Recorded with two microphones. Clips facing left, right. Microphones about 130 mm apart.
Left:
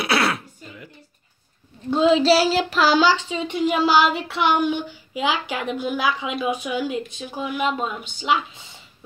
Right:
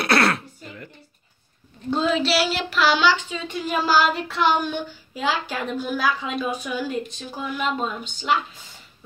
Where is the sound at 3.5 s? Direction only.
20° left (ahead or behind).